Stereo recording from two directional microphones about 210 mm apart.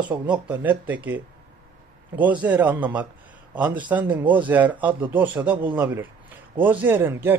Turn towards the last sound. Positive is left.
turn(degrees=-10)  # may be behind; listen again after turning